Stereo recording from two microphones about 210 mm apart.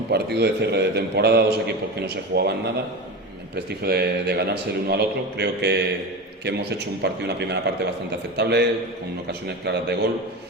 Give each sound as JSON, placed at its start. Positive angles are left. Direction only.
{"t": 0.1, "sound": "a man's voice", "side_deg": -50}
{"t": 3.5, "sound": "a man's voice", "side_deg": -50}